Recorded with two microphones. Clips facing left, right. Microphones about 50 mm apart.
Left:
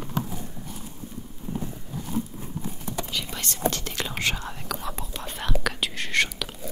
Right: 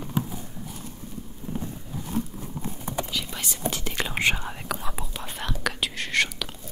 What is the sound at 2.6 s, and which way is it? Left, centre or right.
Horse, right.